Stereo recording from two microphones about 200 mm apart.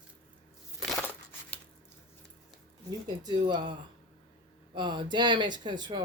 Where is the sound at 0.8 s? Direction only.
Centre (ahead or behind).